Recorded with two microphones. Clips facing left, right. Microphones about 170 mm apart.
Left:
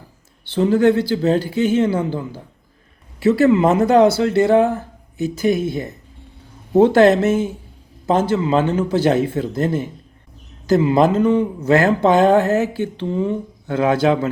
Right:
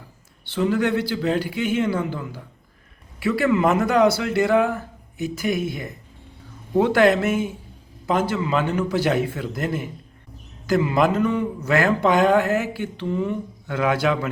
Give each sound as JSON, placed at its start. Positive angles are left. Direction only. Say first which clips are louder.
{"t": 0.5, "sound": "speech", "louder": "left 6 dB", "side_deg": 35}